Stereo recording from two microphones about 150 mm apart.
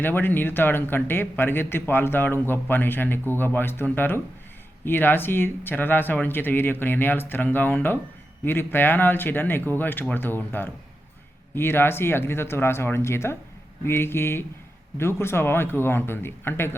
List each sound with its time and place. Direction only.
0.0 s a man's voice: 15° left (ahead or behind)